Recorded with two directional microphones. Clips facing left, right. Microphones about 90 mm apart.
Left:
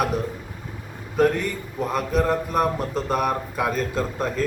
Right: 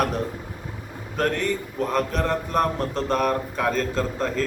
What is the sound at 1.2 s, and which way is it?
A man's voice, 5° left (ahead or behind).